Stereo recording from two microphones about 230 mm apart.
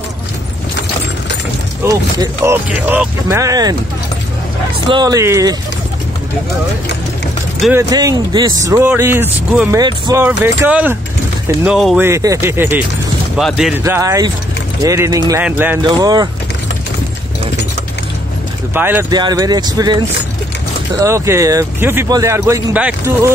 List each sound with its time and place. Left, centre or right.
1.8 s speech: centre
4.8 s speech: centre
7.7 s speech: centre
18.7 s speech: centre
21.0 s speech: centre